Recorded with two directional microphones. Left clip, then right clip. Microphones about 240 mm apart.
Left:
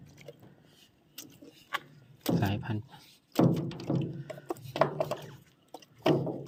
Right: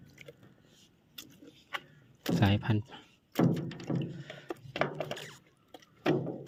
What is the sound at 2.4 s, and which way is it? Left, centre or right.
Speech, right.